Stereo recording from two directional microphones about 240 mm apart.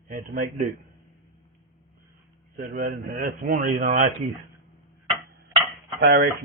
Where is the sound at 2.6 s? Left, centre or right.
Right.